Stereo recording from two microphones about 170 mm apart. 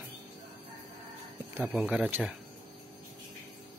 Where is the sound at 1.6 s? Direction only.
10° right (ahead or behind).